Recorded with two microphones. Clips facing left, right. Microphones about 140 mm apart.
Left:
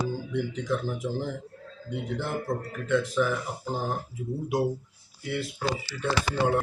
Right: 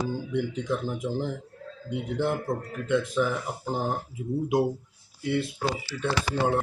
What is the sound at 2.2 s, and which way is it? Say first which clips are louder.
Speech: right 5 dB; 20° right (ahead or behind).